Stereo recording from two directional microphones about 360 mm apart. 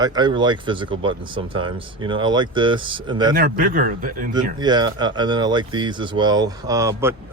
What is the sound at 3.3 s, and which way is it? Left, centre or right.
Speech, right.